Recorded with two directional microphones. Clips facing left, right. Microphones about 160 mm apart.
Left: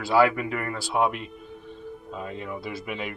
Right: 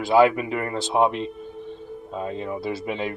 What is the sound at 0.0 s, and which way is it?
Speech, 20° right (ahead or behind).